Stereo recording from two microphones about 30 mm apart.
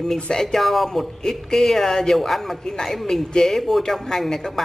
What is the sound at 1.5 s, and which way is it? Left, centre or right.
A man's voice, centre.